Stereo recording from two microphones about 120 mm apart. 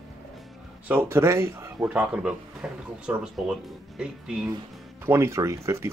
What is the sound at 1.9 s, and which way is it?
Speech, 10° right (ahead or behind).